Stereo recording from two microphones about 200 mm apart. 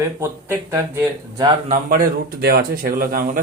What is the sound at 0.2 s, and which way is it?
Speech, 15° right (ahead or behind).